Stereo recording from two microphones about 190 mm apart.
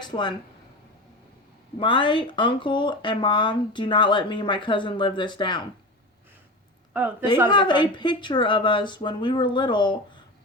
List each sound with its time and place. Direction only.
0.0 s speech: 25° left (ahead or behind)
1.8 s speech: 25° left (ahead or behind)
6.9 s a woman's voice: 10° right (ahead or behind)
7.5 s speech: 25° left (ahead or behind)